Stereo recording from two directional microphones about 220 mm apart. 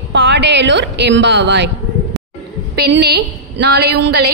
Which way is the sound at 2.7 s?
45° right (ahead or behind).